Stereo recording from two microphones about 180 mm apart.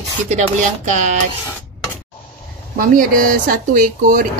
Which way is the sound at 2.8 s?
50° right (ahead or behind).